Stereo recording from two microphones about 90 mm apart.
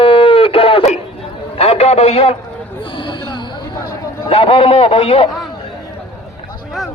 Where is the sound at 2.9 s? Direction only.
65° left (ahead or behind).